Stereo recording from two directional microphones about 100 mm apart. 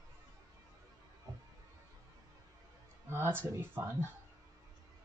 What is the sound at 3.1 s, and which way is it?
Speech, 25° right (ahead or behind).